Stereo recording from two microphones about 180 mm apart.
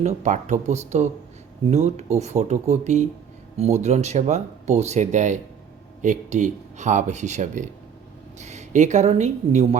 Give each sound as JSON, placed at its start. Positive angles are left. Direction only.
{"t": 0.0, "sound": "speech", "side_deg": -40}